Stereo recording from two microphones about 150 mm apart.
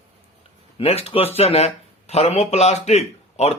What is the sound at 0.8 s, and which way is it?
Speech, 45° left (ahead or behind).